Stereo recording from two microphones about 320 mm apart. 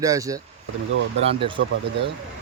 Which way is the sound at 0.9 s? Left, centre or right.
Right.